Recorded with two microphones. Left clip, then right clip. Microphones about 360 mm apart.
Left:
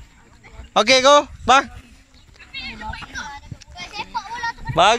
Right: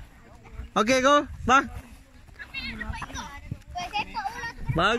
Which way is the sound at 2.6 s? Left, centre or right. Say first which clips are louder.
Left 5 dB; right.